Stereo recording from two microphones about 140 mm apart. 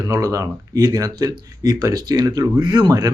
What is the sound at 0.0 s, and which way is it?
Speech, 25° right (ahead or behind).